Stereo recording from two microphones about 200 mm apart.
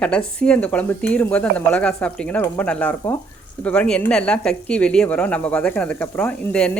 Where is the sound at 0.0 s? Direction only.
5° left (ahead or behind).